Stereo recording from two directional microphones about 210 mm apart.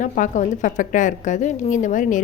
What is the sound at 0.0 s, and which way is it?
A woman's voice, 35° left (ahead or behind).